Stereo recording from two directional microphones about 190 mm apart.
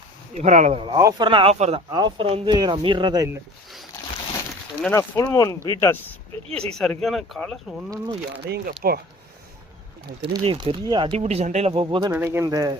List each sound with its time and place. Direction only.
0.3 s speech: 40° right (ahead or behind)
0.9 s speech: 15° right (ahead or behind)
1.3 s speech: 30° right (ahead or behind)
1.9 s speech: 20° right (ahead or behind)
4.8 s speech: 15° left (ahead or behind)
8.4 s speech: 60° right (ahead or behind)
10.3 s speech: 25° right (ahead or behind)
12.1 s speech: 10° right (ahead or behind)